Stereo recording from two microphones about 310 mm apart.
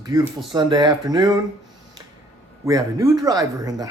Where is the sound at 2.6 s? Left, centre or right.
Centre.